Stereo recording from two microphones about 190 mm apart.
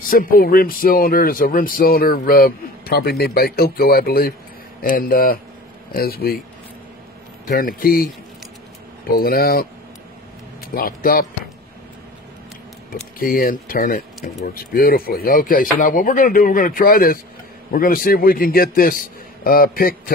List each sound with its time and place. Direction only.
0.1 s speech: 50° left (ahead or behind)
7.4 s speech: 50° left (ahead or behind)
9.2 s speech: 50° left (ahead or behind)
10.7 s speech: 50° left (ahead or behind)
13.2 s speech: 50° left (ahead or behind)